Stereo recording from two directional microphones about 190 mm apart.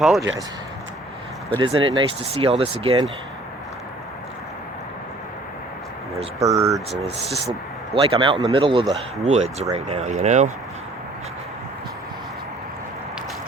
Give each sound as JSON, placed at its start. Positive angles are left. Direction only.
{"t": 1.5, "sound": "speech", "side_deg": -25}
{"t": 6.4, "sound": "speech", "side_deg": -15}
{"t": 7.9, "sound": "speech", "side_deg": -30}